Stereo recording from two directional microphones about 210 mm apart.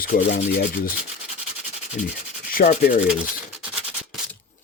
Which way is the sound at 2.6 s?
45° left (ahead or behind).